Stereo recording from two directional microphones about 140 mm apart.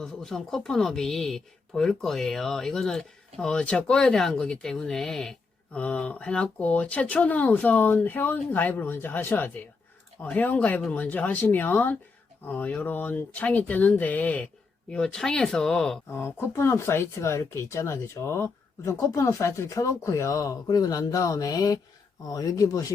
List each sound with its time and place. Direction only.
0.0 s speech: 5° left (ahead or behind)
16.0 s speech: 15° left (ahead or behind)